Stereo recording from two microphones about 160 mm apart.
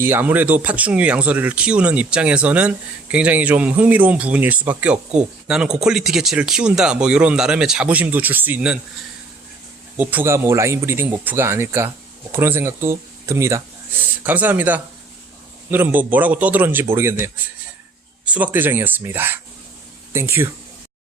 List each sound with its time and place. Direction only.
0.0 s speech: 15° right (ahead or behind)
10.0 s speech: 10° right (ahead or behind)